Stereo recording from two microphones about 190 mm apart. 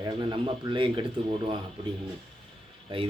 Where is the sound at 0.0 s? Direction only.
25° right (ahead or behind).